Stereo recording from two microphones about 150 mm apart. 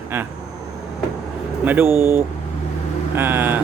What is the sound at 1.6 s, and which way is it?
Speech, 15° right (ahead or behind).